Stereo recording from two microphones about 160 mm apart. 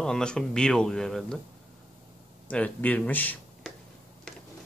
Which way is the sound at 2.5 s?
10° left (ahead or behind).